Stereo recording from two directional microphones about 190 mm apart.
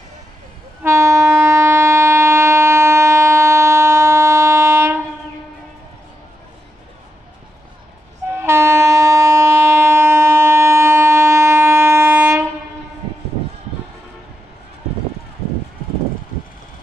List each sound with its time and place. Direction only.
0.8 s train: 15° right (ahead or behind)
8.3 s train: 15° right (ahead or behind)